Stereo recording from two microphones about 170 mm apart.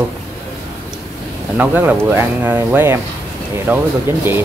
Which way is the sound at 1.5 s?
10° right (ahead or behind).